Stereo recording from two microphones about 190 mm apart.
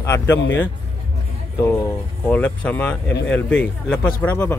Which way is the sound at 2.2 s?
10° left (ahead or behind).